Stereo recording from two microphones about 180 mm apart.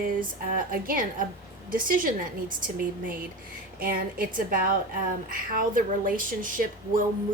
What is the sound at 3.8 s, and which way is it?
A woman's voice, 50° right (ahead or behind).